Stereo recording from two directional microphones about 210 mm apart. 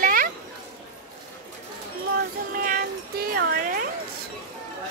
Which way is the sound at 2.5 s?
40° right (ahead or behind).